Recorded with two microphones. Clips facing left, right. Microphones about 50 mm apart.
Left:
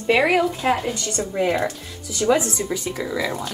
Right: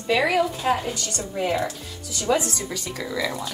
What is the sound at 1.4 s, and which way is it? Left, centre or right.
A woman's voice, centre.